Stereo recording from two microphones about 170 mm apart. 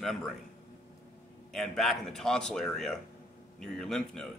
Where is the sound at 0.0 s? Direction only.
Centre (ahead or behind).